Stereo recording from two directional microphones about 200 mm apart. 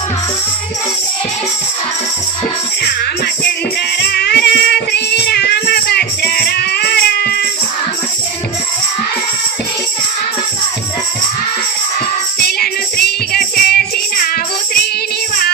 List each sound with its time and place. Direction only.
4.0 s child singing: 55° left (ahead or behind)
12.4 s music: 50° left (ahead or behind)